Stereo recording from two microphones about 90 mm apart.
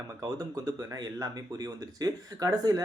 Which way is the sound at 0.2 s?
40° right (ahead or behind).